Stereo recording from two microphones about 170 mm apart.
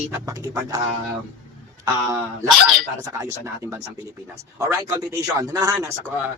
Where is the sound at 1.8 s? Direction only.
20° right (ahead or behind).